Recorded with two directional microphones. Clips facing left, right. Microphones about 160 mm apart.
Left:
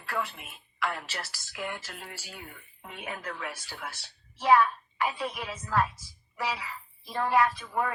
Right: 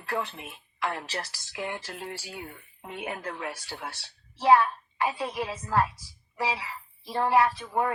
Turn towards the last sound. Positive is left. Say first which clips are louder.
# right 3 dB
turn(degrees=-30)  # may be behind; listen again after turning